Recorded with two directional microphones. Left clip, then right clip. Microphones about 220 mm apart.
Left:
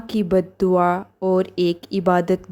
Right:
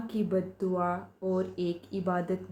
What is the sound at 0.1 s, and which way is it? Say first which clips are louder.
A woman's voice: left 12 dB; 45° left (ahead or behind).